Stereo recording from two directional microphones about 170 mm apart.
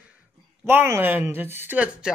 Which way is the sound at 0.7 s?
15° right (ahead or behind).